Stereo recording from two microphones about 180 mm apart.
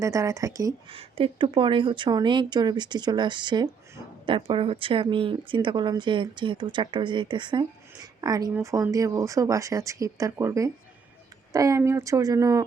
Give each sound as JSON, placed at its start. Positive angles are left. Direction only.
{"t": 0.0, "sound": "speech", "side_deg": -15}
{"t": 0.9, "sound": "speech", "side_deg": -30}